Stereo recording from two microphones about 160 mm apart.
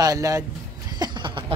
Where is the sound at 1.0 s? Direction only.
30° right (ahead or behind).